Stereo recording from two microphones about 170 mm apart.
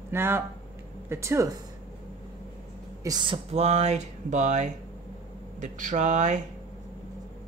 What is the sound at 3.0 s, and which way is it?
Speech, 25° right (ahead or behind).